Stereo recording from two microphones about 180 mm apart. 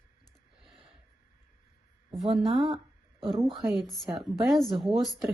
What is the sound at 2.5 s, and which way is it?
A woman's voice, centre (ahead or behind).